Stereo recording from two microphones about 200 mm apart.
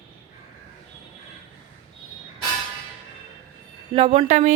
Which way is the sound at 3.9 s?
25° right (ahead or behind).